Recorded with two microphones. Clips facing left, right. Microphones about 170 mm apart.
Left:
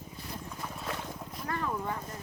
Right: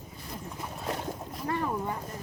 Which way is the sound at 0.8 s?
35° right (ahead or behind).